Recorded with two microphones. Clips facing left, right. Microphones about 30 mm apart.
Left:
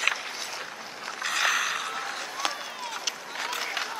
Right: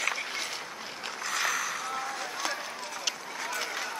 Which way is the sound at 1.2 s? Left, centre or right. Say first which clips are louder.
Left 5 dB; left.